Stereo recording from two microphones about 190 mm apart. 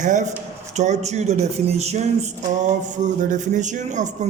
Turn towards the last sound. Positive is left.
turn(degrees=-40)  # may be behind; listen again after turning